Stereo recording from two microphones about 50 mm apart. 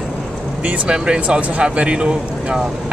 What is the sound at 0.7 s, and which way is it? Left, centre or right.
Speech, centre.